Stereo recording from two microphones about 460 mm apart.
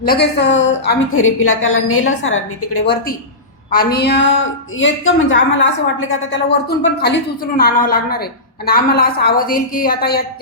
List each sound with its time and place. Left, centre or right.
0.1 s a woman's voice: left